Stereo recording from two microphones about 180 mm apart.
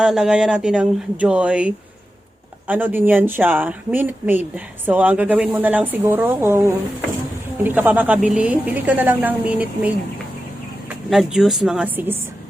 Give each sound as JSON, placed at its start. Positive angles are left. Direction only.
{"t": 0.0, "sound": "speech", "side_deg": -5}
{"t": 11.1, "sound": "speech", "side_deg": 0}